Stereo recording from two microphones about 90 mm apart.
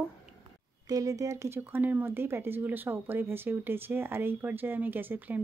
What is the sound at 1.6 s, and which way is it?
A woman's voice, 20° right (ahead or behind).